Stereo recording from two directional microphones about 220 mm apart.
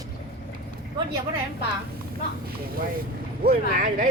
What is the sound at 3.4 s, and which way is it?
Speech, 40° right (ahead or behind).